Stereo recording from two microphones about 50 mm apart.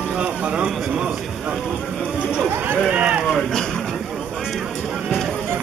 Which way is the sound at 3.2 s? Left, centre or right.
Centre.